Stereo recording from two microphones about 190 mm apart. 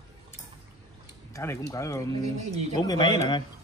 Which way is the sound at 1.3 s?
15° left (ahead or behind).